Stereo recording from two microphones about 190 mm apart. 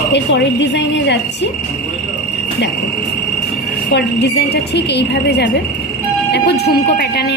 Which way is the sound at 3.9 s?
65° left (ahead or behind).